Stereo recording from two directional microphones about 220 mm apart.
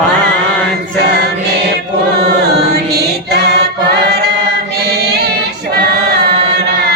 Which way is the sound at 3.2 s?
50° right (ahead or behind).